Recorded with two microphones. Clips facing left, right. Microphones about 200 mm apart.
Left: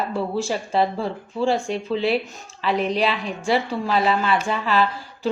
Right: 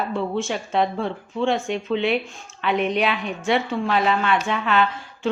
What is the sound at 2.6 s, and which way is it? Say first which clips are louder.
Speech: even; 35° left (ahead or behind).